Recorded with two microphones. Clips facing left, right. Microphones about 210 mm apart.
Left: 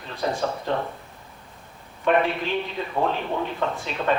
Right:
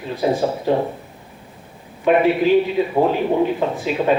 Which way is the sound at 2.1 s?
15° right (ahead or behind).